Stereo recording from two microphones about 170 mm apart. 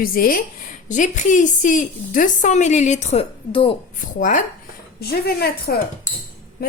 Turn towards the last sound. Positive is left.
turn(degrees=60)  # may be behind; listen again after turning